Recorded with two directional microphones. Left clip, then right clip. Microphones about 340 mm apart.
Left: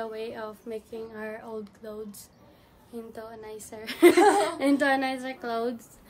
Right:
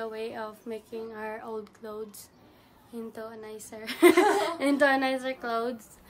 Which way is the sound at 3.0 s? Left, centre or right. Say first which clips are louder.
Right 1 dB; centre.